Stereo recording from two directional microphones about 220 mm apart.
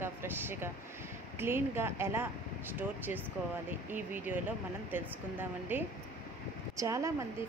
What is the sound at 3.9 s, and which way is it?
A woman's voice, 10° right (ahead or behind).